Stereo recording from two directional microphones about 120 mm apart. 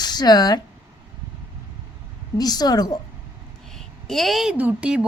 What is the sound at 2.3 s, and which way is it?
Speech, 35° left (ahead or behind).